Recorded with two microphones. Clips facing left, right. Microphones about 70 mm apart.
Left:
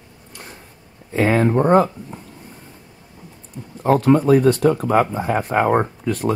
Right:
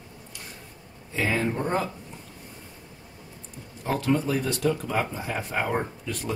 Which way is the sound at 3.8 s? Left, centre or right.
Left.